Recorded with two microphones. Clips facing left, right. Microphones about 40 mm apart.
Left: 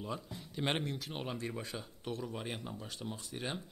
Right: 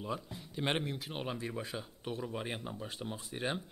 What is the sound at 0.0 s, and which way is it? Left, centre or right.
Speech, centre.